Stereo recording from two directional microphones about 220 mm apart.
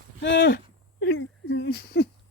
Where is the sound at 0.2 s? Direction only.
55° left (ahead or behind).